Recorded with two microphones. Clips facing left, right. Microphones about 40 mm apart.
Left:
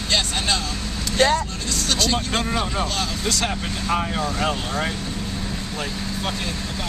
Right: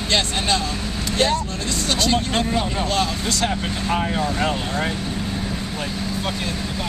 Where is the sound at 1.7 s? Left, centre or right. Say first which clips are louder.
Right 2 dB; centre.